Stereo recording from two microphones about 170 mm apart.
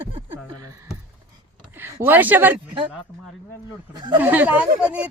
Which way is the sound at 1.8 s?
10° right (ahead or behind).